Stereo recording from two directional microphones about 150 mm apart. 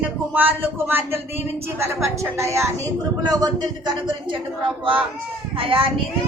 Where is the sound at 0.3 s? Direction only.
10° right (ahead or behind).